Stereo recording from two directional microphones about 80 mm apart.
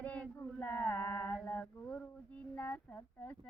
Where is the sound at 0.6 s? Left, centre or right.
Centre.